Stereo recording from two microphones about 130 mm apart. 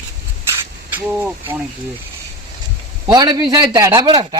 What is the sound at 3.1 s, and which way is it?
A man's voice, 30° right (ahead or behind).